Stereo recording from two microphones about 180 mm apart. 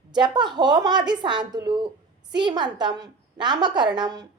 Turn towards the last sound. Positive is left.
turn(degrees=-25)  # may be behind; listen again after turning